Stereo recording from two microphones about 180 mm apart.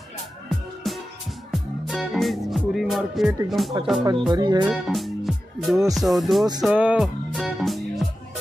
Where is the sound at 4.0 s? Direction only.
25° right (ahead or behind).